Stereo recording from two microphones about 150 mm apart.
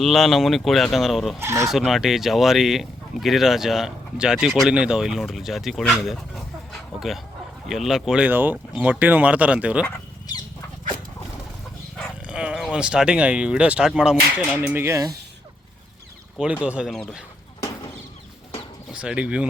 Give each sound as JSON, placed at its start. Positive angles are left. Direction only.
{"t": 0.0, "sound": "speech", "side_deg": 0}
{"t": 1.4, "sound": "speech", "side_deg": -20}
{"t": 1.7, "sound": "speech", "side_deg": 0}
{"t": 7.7, "sound": "speech", "side_deg": 0}
{"t": 10.3, "sound": "a sound", "side_deg": 25}
{"t": 12.3, "sound": "speech", "side_deg": -5}
{"t": 16.4, "sound": "speech", "side_deg": -10}
{"t": 18.9, "sound": "speech", "side_deg": -5}